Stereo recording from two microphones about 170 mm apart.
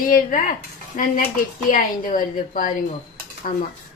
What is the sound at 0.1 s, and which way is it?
A woman's voice, 50° left (ahead or behind).